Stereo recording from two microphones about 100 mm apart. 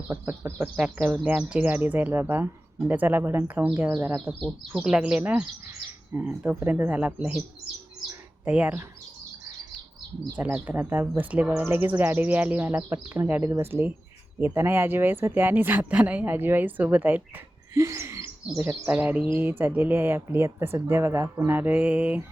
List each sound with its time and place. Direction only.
0.1 s speech: 20° right (ahead or behind)
8.4 s speech: 15° right (ahead or behind)
10.3 s speech: 15° right (ahead or behind)
17.7 s speech: 30° right (ahead or behind)
18.4 s speech: 10° right (ahead or behind)